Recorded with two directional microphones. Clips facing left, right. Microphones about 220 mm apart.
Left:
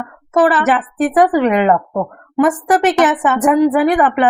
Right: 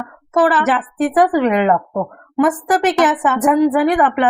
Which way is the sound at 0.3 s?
25° left (ahead or behind).